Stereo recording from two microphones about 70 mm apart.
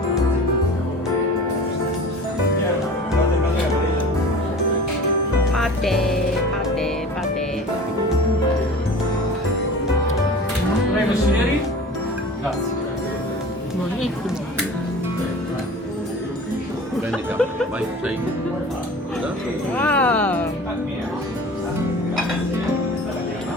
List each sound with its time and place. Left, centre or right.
5.5 s music: centre
19.7 s speech: left